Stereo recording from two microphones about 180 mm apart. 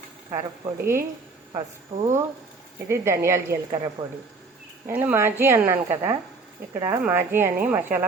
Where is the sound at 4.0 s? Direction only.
25° right (ahead or behind).